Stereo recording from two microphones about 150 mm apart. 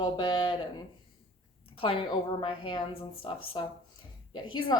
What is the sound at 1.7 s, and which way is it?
Speech, 35° left (ahead or behind).